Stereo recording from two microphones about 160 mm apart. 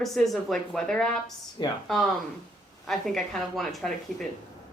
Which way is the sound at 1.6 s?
25° left (ahead or behind).